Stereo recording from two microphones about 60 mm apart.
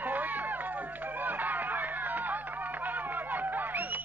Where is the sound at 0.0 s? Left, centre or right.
Right.